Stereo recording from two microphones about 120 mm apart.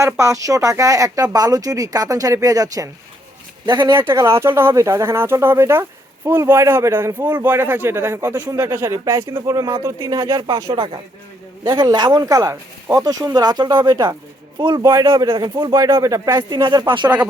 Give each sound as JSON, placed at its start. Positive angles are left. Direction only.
{"t": 0.0, "sound": "speech", "side_deg": -25}
{"t": 3.9, "sound": "speech", "side_deg": -20}
{"t": 8.3, "sound": "speech", "side_deg": -30}
{"t": 14.8, "sound": "speech", "side_deg": -20}
{"t": 15.3, "sound": "speech", "side_deg": -40}
{"t": 15.7, "sound": "speech", "side_deg": -25}